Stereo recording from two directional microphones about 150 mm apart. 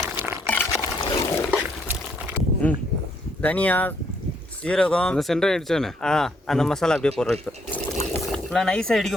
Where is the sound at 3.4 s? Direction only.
10° left (ahead or behind).